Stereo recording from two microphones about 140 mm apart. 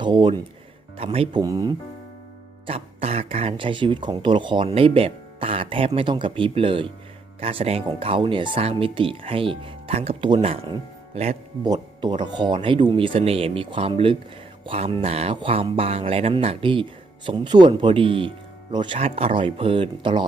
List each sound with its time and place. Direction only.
0.0 s speech: 30° right (ahead or behind)
0.9 s speech: 45° right (ahead or behind)
1.4 s speech: 25° right (ahead or behind)
2.6 s speech: 45° right (ahead or behind)
11.6 s speech: 30° right (ahead or behind)